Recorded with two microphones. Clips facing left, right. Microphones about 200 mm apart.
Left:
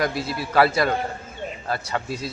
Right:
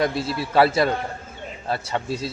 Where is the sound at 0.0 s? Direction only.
25° right (ahead or behind).